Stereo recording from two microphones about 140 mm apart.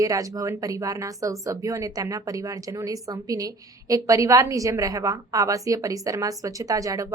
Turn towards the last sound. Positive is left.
turn(degrees=-25)  # may be behind; listen again after turning